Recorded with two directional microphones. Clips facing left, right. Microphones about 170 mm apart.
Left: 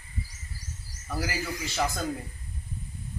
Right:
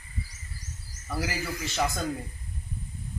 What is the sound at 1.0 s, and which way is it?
Speech, centre (ahead or behind).